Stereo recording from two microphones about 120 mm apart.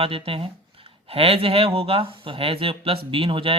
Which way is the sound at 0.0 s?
50° right (ahead or behind).